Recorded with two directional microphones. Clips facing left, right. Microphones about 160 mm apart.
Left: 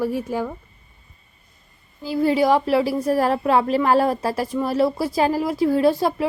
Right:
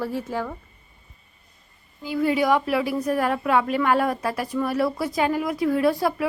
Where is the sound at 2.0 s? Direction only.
30° left (ahead or behind).